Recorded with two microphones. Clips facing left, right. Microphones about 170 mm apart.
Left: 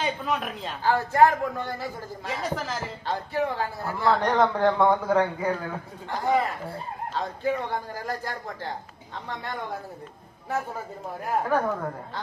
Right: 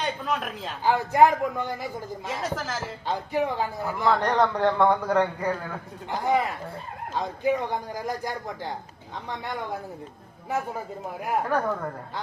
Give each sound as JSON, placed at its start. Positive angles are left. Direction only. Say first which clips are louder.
{"t": 0.0, "sound": "a man's voice", "louder": "left 1 dB", "side_deg": 0}
{"t": 0.9, "sound": "speech", "louder": "right 1 dB", "side_deg": -15}
{"t": 2.2, "sound": "a man's voice", "louder": "left 1 dB", "side_deg": 0}
{"t": 3.1, "sound": "speech", "louder": "right 1 dB", "side_deg": -15}
{"t": 4.1, "sound": "a man's voice", "louder": "left 1 dB", "side_deg": 5}
{"t": 6.1, "sound": "speech", "louder": "even", "side_deg": -15}
{"t": 11.4, "sound": "a man's voice", "louder": "left 1 dB", "side_deg": 5}